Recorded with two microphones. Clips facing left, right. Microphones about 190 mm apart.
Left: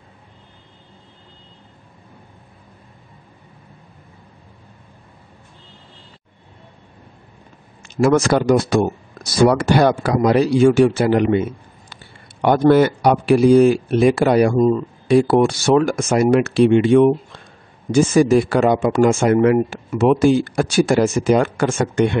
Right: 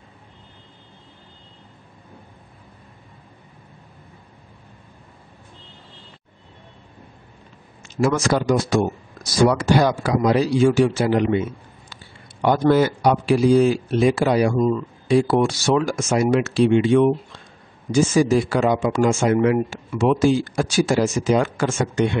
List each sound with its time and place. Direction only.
7.9 s a man's voice: 60° left (ahead or behind)
14.6 s speech: 35° left (ahead or behind)
15.0 s speech: 60° left (ahead or behind)